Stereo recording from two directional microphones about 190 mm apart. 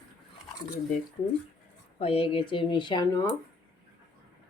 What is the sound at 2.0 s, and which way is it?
Speech, 30° left (ahead or behind).